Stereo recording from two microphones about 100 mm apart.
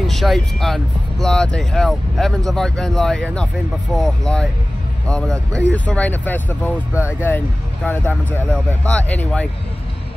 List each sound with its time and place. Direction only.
0.0 s speech: centre (ahead or behind); by 6.8 s 15° left (ahead or behind)
6.9 s speech: 15° right (ahead or behind)
7.2 s speech: 20° left (ahead or behind)